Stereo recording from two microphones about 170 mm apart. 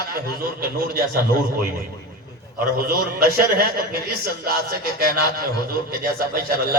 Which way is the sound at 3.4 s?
60° right (ahead or behind).